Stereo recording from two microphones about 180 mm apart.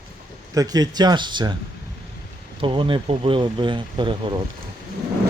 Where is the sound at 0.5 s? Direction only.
20° right (ahead or behind).